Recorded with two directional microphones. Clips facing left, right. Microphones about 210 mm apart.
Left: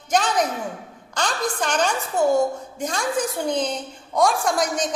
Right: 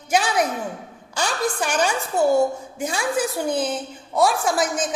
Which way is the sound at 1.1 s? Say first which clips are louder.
Right 1 dB; 10° right (ahead or behind).